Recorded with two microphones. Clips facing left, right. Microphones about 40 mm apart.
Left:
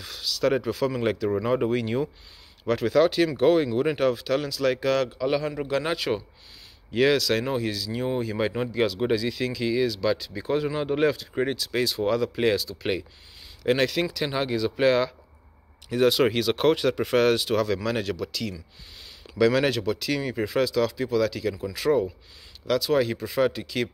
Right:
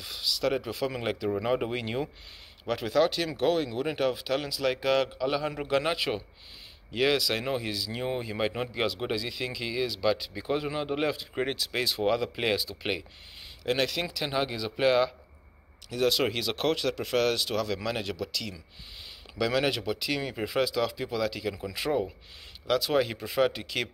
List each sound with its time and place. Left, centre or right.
0.0 s a sound: centre
0.8 s speech: centre
2.6 s speech: centre
4.1 s speech: centre
5.9 s a man's voice: centre
7.2 s speech: centre
11.4 s speech: right
13.7 s speech: centre
16.1 s speech: centre
17.8 s speech: centre
21.8 s speech: centre
22.7 s speech: centre
23.1 s speech: right